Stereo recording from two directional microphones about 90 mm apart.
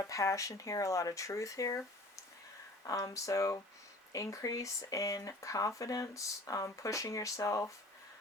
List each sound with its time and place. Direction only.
0.0 s speech: 35° left (ahead or behind)